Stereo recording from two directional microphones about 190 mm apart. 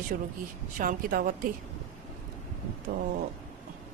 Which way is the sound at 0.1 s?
45° right (ahead or behind).